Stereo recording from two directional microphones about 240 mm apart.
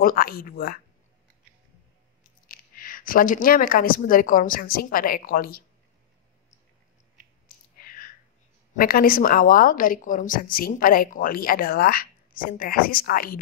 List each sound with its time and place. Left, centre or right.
0.0 s a woman's voice: left
2.4 s speech: left
7.4 s a sound: left
8.7 s a woman's voice: left